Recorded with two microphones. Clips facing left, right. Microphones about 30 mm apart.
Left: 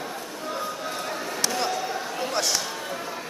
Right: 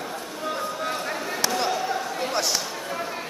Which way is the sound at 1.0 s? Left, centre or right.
Right.